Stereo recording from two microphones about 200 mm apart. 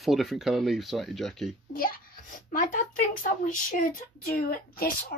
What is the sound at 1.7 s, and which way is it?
A child's voice, 45° left (ahead or behind).